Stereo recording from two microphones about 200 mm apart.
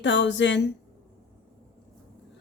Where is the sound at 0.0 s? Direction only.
65° left (ahead or behind).